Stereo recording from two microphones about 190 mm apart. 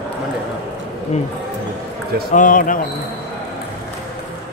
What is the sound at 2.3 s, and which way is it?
Speech, 45° left (ahead or behind).